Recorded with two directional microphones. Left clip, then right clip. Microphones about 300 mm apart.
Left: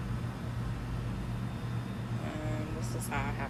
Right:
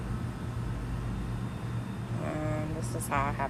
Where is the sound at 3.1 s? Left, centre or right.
Centre.